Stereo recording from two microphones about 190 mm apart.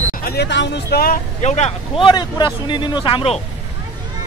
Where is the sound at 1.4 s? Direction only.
35° left (ahead or behind).